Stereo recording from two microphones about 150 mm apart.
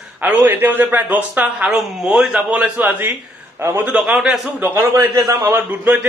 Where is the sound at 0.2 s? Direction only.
10° right (ahead or behind).